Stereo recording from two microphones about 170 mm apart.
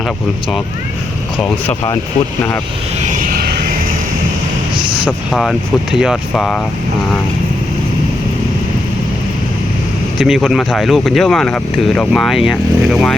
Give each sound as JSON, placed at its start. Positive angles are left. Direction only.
{"t": 3.1, "sound": "a sound", "side_deg": -55}
{"t": 5.0, "sound": "speech", "side_deg": 0}
{"t": 10.2, "sound": "speech", "side_deg": 0}